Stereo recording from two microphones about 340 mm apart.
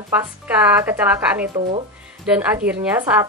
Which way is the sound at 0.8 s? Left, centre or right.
Centre.